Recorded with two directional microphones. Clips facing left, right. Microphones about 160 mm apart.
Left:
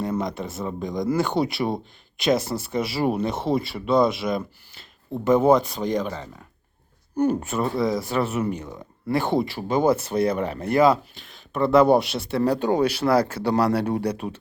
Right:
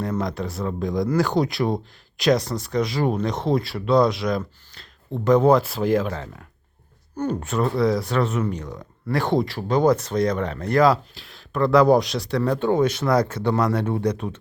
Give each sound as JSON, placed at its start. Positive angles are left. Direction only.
{"t": 0.0, "sound": "speech", "side_deg": 0}
{"t": 7.2, "sound": "speech", "side_deg": 10}
{"t": 12.4, "sound": "speech", "side_deg": 40}